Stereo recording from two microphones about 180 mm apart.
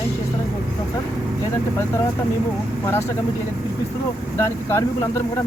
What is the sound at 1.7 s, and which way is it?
Speech, 15° left (ahead or behind).